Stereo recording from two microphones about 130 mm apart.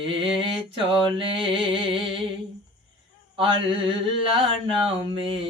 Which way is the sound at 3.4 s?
40° right (ahead or behind).